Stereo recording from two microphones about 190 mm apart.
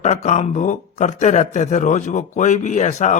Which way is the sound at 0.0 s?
40° left (ahead or behind).